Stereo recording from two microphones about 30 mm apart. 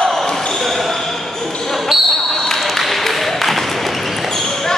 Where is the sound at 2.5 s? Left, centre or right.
Centre.